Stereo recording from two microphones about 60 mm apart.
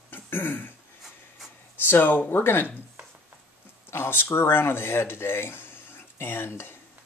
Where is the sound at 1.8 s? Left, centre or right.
Left.